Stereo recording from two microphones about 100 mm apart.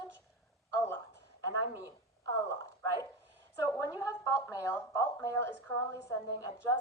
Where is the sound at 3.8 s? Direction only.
35° left (ahead or behind).